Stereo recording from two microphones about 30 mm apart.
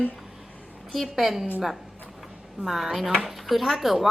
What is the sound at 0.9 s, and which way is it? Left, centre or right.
Speech, centre.